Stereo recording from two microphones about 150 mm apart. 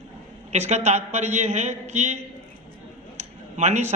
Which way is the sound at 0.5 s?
50° right (ahead or behind).